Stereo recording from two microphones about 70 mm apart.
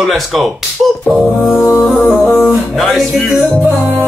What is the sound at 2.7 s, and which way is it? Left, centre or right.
Speech, centre.